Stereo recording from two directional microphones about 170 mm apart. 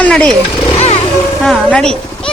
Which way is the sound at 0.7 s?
40° left (ahead or behind).